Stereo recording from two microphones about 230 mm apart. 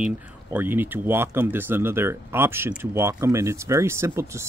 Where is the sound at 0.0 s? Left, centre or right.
Centre.